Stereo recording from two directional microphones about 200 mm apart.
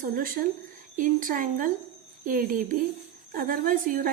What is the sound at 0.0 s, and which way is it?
A woman's voice, 45° right (ahead or behind).